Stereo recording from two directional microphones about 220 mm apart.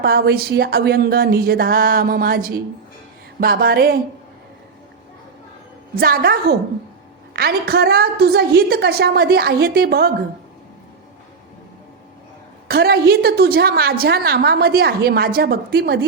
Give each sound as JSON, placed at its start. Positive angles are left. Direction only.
{"t": 0.0, "sound": "a woman's voice", "side_deg": -45}
{"t": 3.4, "sound": "a sound", "side_deg": -40}
{"t": 6.0, "sound": "a woman's voice", "side_deg": -45}
{"t": 12.6, "sound": "a woman's voice", "side_deg": -45}